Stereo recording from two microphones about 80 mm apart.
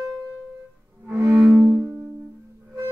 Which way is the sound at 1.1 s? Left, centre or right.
Right.